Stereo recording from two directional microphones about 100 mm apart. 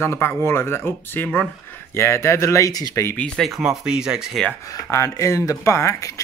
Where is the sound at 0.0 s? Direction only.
25° left (ahead or behind).